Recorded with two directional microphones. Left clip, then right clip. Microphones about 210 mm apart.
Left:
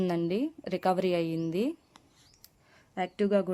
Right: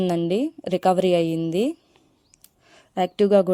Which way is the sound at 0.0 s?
30° right (ahead or behind).